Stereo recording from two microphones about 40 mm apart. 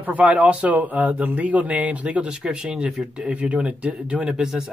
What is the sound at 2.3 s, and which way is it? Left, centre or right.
Speech, right.